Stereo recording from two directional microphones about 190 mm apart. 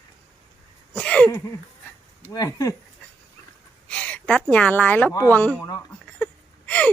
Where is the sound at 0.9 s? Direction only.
5° left (ahead or behind).